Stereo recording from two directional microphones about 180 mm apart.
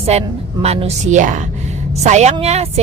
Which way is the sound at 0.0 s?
35° right (ahead or behind).